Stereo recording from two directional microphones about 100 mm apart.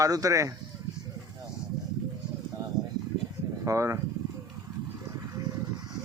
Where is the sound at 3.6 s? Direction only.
30° right (ahead or behind).